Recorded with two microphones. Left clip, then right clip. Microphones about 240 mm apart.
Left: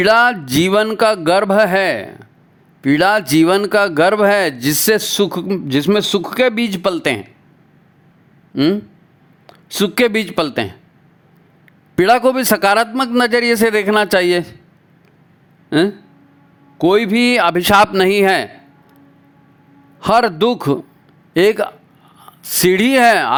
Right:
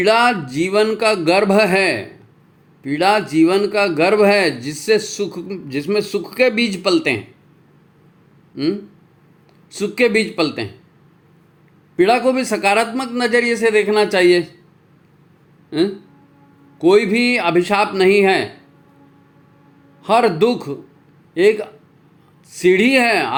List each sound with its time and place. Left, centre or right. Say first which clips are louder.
0.0 s a man's voice: left 2 dB; left
8.5 s a man's voice: left 5 dB; left
11.9 s a man's voice: left 2 dB; left
15.7 s a man's voice: left 4 dB; left
20.0 s a man's voice: left 1 dB; left